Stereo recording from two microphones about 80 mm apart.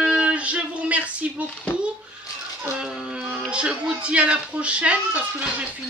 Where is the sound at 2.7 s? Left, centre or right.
Centre.